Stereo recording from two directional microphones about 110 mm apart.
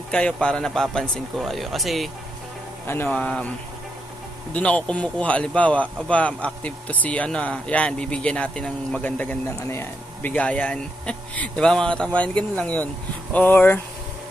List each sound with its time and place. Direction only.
0.1 s speech: 10° left (ahead or behind)
2.9 s speech: 15° left (ahead or behind)
4.6 s speech: 10° left (ahead or behind)